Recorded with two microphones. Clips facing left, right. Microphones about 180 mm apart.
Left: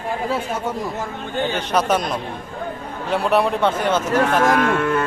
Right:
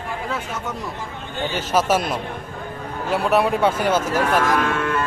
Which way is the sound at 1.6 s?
5° right (ahead or behind).